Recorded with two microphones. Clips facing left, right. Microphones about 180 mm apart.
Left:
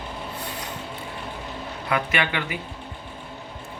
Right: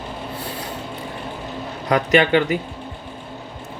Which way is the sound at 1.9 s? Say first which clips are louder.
Right 10 dB; 35° right (ahead or behind).